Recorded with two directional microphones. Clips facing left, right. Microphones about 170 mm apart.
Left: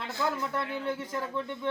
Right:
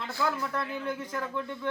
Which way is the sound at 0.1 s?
20° left (ahead or behind).